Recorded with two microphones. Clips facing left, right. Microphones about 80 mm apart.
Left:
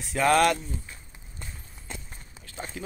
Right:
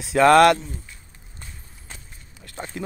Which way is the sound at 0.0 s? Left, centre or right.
Right.